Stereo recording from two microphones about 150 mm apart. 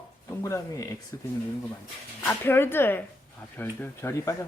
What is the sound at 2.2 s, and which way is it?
Speech, 15° left (ahead or behind).